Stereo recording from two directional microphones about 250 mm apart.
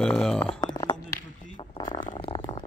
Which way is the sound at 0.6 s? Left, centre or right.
Centre.